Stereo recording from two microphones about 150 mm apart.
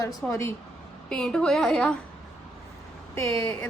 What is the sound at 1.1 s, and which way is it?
Speech, 5° left (ahead or behind).